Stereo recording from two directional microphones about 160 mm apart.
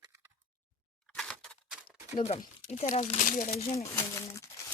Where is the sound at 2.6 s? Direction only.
50° left (ahead or behind).